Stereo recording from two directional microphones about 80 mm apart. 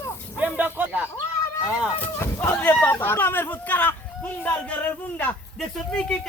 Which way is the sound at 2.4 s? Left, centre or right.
Left.